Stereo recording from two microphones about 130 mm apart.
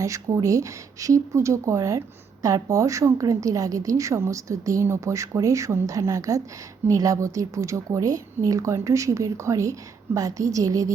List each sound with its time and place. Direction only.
0.0 s speech: 25° right (ahead or behind)